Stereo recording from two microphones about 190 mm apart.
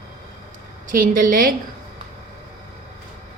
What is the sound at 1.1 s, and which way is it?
Speech, 45° right (ahead or behind).